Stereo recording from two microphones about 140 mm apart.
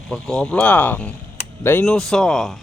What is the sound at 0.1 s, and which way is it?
Speech, 5° left (ahead or behind).